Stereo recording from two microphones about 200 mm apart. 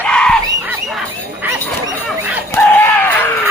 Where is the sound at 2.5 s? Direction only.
10° left (ahead or behind).